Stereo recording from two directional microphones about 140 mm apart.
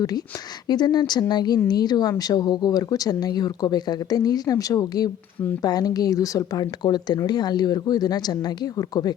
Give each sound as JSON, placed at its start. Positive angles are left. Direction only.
{"t": 0.7, "sound": "a woman's voice", "side_deg": 30}